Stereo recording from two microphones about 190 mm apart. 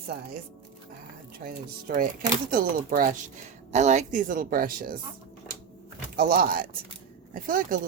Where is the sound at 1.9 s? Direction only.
50° right (ahead or behind).